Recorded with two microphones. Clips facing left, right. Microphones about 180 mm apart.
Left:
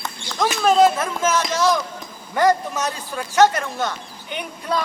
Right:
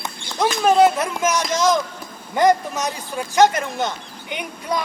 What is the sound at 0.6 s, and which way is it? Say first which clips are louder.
A man's voice: even; 15° right (ahead or behind).